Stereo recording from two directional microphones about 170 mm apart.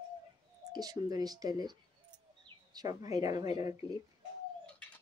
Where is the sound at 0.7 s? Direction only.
25° right (ahead or behind).